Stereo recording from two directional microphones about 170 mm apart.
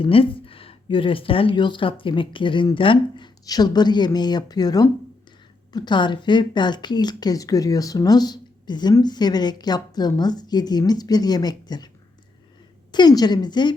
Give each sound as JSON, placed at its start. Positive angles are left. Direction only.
{"t": 0.0, "sound": "speech", "side_deg": 30}
{"t": 12.9, "sound": "speech", "side_deg": 25}